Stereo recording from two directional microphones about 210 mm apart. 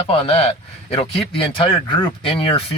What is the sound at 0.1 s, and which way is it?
Speech, 25° left (ahead or behind).